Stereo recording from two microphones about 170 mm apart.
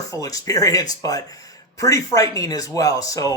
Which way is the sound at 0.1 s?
20° left (ahead or behind).